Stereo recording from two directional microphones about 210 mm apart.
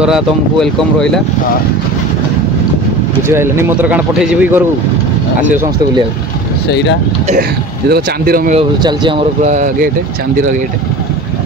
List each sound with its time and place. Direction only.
0.0 s speech: centre (ahead or behind)
3.3 s speech: 10° right (ahead or behind)
6.7 s speech: 55° left (ahead or behind)
7.9 s speech: 45° right (ahead or behind)
8.5 s speech: 25° right (ahead or behind)
9.4 s speech: 35° right (ahead or behind)